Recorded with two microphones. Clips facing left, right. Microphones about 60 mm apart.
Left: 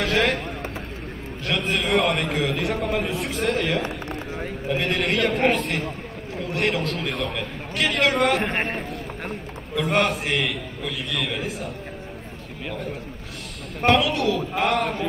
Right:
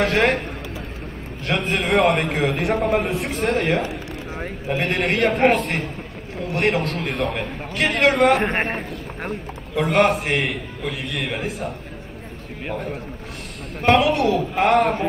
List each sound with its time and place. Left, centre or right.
0.0 s speech: right
1.5 s a man's voice: right
8.5 s a man's voice: right
9.8 s a man's voice: right
13.8 s a man's voice: right